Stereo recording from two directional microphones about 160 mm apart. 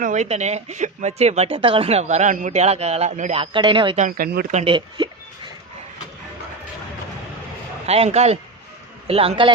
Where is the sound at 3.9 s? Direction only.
50° right (ahead or behind).